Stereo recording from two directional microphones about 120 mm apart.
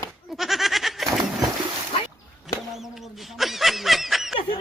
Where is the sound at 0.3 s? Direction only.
Centre (ahead or behind).